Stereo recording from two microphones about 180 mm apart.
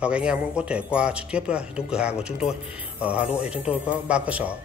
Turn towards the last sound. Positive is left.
turn(degrees=-5)  # may be behind; listen again after turning